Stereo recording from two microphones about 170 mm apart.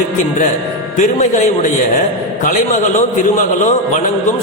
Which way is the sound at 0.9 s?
45° left (ahead or behind).